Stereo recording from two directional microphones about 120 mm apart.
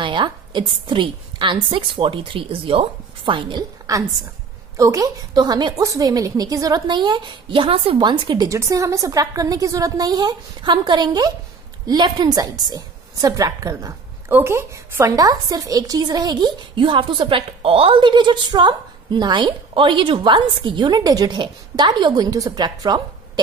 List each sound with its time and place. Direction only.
0.0 s a woman's voice: 40° right (ahead or behind)
3.9 s a woman's voice: 30° right (ahead or behind)
8.5 s a woman's voice: 25° right (ahead or behind)